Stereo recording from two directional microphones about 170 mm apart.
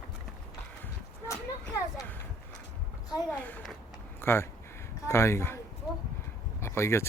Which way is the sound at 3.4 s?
5° left (ahead or behind).